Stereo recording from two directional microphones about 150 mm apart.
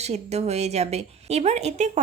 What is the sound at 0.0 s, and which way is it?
Speech, 45° right (ahead or behind).